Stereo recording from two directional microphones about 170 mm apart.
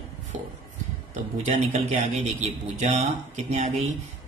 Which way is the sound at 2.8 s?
45° right (ahead or behind).